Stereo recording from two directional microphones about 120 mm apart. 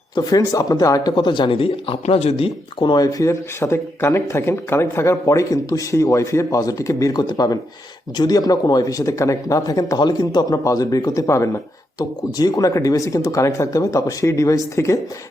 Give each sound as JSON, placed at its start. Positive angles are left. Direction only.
{"t": 0.2, "sound": "speech", "side_deg": 30}
{"t": 2.9, "sound": "speech", "side_deg": 30}